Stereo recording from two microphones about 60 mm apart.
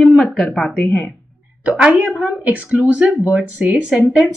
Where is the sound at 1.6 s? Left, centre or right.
Right.